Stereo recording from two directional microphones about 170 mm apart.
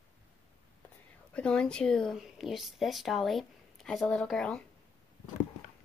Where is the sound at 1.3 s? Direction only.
5° left (ahead or behind).